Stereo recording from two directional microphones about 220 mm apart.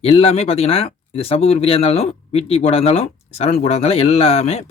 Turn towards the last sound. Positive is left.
turn(degrees=30)  # may be behind; listen again after turning